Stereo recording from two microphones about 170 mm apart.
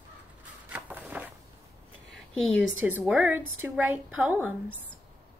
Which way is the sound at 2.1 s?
5° left (ahead or behind).